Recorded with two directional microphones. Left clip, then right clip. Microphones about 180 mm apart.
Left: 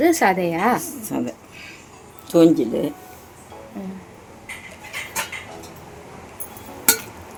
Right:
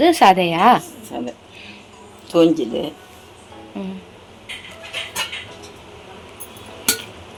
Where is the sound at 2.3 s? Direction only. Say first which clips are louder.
Even; 40° left (ahead or behind).